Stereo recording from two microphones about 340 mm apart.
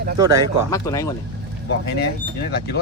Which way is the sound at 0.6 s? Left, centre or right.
Centre.